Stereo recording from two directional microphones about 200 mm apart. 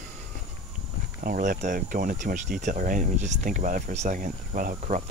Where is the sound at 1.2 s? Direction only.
45° right (ahead or behind).